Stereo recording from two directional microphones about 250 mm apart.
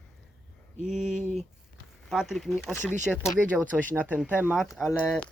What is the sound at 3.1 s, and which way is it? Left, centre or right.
Speech, centre.